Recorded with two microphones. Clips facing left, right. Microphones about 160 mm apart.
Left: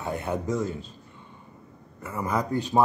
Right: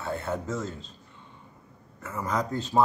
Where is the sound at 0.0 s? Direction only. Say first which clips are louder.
Left 2 dB; 15° left (ahead or behind).